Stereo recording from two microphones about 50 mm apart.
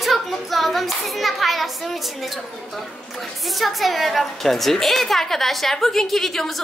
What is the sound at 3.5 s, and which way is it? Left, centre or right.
A woman's voice, centre.